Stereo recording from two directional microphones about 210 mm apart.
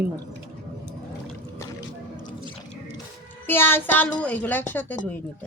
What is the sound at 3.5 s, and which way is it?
A woman's voice, 10° left (ahead or behind).